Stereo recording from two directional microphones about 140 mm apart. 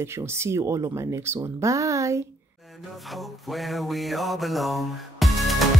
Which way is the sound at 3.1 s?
Centre (ahead or behind).